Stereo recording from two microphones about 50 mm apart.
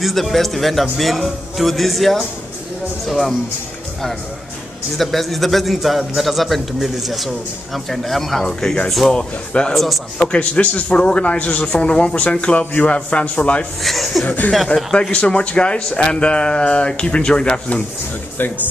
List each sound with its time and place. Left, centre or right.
0.0 s speech: centre
4.9 s speech: centre; by 13.7 s left
13.8 s speech: centre
14.2 s speech: left
15.0 s speech: left
18.4 s speech: left